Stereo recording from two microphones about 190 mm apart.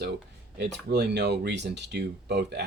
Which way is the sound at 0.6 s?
60° right (ahead or behind).